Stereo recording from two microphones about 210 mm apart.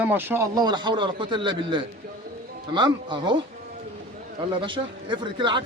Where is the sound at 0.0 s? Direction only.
10° right (ahead or behind).